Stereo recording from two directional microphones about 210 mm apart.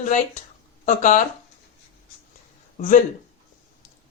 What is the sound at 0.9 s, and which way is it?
Speech, 35° left (ahead or behind).